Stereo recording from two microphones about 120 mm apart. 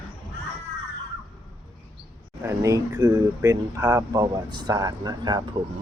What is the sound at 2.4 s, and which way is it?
Speech, 25° right (ahead or behind).